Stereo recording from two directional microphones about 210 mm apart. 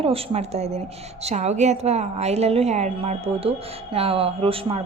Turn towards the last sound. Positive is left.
turn(degrees=-25)  # may be behind; listen again after turning